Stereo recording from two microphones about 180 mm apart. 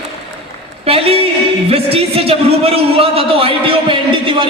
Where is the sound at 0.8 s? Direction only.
35° right (ahead or behind).